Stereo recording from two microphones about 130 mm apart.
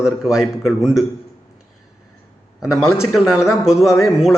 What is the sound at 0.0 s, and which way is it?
A man's voice, 5° right (ahead or behind).